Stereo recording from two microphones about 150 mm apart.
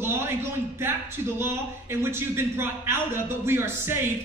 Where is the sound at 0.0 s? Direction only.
15° right (ahead or behind).